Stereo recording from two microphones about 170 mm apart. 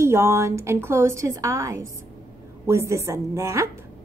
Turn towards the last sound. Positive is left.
turn(degrees=-15)  # may be behind; listen again after turning